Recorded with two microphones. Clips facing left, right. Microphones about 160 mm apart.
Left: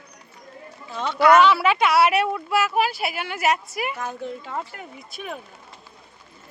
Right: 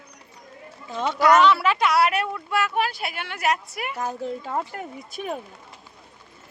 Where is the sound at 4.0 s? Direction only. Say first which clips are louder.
Right 2 dB; 40° right (ahead or behind).